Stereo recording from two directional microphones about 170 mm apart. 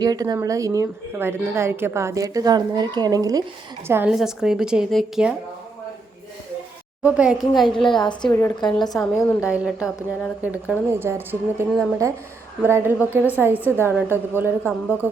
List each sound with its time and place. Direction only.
0.0 s a woman's voice: 20° right (ahead or behind)
4.1 s a woman's voice: 5° right (ahead or behind)
7.0 s a woman's voice: 5° right (ahead or behind)
7.9 s a woman's voice: 25° left (ahead or behind)
8.3 s a woman's voice: 10° left (ahead or behind)
8.6 s a woman's voice: 25° left (ahead or behind)
9.4 s a woman's voice: 5° right (ahead or behind)
12.6 s a woman's voice: 15° right (ahead or behind)
13.5 s a woman's voice: 10° left (ahead or behind)
13.7 s a woman's voice: 15° right (ahead or behind)